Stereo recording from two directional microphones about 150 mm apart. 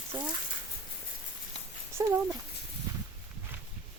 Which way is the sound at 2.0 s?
20° right (ahead or behind).